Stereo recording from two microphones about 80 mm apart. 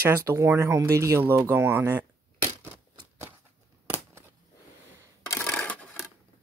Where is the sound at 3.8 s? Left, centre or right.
Right.